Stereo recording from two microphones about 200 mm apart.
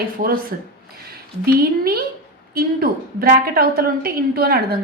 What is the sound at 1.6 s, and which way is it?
A woman's voice, 50° right (ahead or behind).